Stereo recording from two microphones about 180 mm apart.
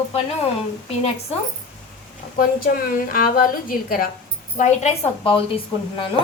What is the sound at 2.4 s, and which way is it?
A woman's voice, 55° left (ahead or behind).